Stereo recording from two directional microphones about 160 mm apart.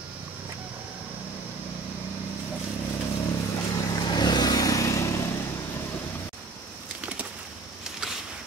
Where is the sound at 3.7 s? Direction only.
25° left (ahead or behind).